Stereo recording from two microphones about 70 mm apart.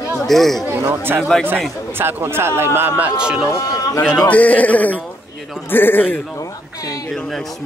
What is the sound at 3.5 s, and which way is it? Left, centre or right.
Speech, left.